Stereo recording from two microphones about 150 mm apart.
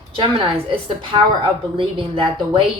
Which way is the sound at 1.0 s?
35° right (ahead or behind).